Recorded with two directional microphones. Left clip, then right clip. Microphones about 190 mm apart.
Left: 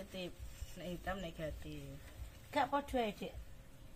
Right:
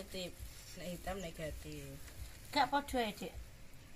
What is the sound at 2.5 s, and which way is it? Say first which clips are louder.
Speech: right 2 dB; 15° left (ahead or behind).